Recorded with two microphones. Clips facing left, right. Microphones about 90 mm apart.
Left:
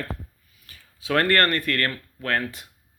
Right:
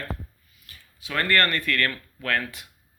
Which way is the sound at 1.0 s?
60° left (ahead or behind).